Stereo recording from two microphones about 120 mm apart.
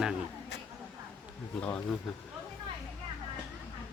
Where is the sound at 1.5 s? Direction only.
10° left (ahead or behind).